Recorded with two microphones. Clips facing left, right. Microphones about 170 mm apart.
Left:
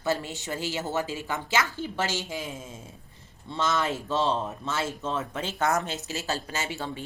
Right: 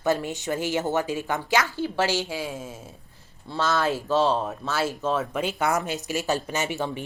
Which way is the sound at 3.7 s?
75° right (ahead or behind).